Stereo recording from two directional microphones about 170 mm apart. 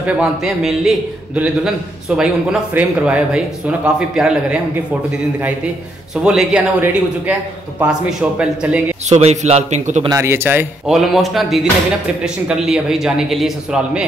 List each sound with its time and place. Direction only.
0.0 s a man's voice: 5° right (ahead or behind)
6.2 s a man's voice: 5° right (ahead or behind)
9.1 s a man's voice: 40° right (ahead or behind)
10.0 s speech: 15° right (ahead or behind)
10.9 s a man's voice: centre (ahead or behind)